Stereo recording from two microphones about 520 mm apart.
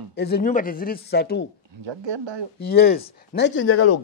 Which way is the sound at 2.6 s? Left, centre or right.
Centre.